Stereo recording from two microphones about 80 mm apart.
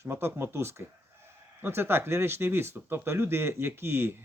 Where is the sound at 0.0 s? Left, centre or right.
Right.